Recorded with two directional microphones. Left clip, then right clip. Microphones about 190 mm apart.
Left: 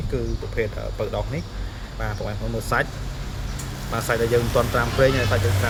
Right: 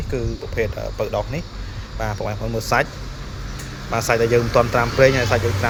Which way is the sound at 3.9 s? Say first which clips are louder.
Right 4 dB; 15° right (ahead or behind).